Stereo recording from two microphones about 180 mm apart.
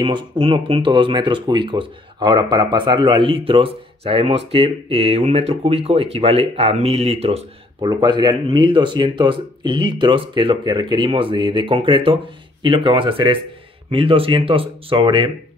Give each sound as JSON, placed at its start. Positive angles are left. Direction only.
{"t": 0.0, "sound": "speech", "side_deg": -30}
{"t": 7.9, "sound": "speech", "side_deg": -25}